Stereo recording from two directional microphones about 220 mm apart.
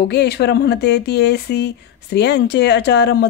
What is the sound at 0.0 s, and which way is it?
Speech, 50° left (ahead or behind).